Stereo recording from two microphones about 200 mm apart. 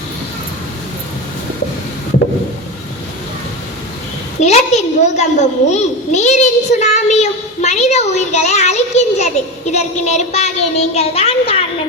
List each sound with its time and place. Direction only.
4.4 s a child's voice: 35° left (ahead or behind)